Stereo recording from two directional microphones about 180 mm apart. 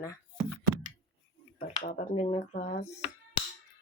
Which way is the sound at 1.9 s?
40° left (ahead or behind).